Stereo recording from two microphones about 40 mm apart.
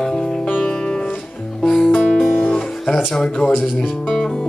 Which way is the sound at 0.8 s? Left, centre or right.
Left.